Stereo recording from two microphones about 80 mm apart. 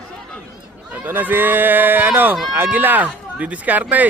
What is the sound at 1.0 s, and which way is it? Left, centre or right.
A man's voice, right.